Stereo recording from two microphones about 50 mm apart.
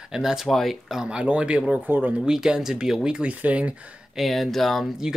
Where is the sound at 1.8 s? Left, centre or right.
Right.